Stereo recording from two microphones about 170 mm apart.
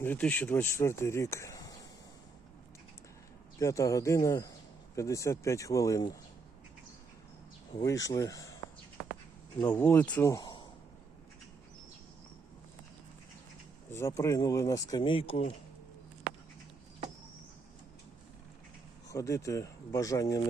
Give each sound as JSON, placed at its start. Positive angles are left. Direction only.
{"t": 0.0, "sound": "speech", "side_deg": 10}
{"t": 3.6, "sound": "speech", "side_deg": 20}
{"t": 7.7, "sound": "speech", "side_deg": 20}
{"t": 9.6, "sound": "speech", "side_deg": 10}
{"t": 13.9, "sound": "speech", "side_deg": 15}
{"t": 19.0, "sound": "speech", "side_deg": 20}